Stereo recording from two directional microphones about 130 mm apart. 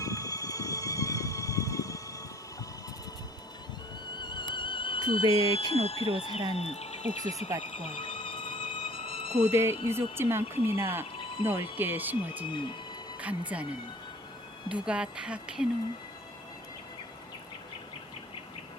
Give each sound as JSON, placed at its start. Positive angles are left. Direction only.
{"t": 0.0, "sound": "music", "side_deg": 25}
{"t": 4.2, "sound": "music", "side_deg": 35}
{"t": 6.1, "sound": "speech", "side_deg": 50}
{"t": 7.9, "sound": "music", "side_deg": 45}
{"t": 9.4, "sound": "speech", "side_deg": -20}
{"t": 11.4, "sound": "speech", "side_deg": 45}
{"t": 11.8, "sound": "speech", "side_deg": -15}
{"t": 12.5, "sound": "speech", "side_deg": 40}
{"t": 13.1, "sound": "speech", "side_deg": -10}
{"t": 14.8, "sound": "speech", "side_deg": -5}